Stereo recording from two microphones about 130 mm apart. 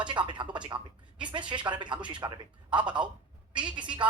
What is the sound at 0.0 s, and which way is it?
Speech, 35° right (ahead or behind).